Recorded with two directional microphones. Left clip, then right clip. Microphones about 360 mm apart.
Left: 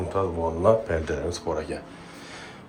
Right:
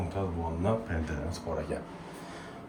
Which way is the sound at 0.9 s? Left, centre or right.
Centre.